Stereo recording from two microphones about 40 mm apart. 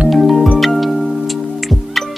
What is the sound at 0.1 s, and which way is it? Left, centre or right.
Music, centre.